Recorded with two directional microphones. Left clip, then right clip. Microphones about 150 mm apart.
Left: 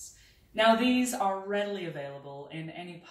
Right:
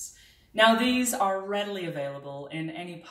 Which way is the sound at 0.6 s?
Centre (ahead or behind).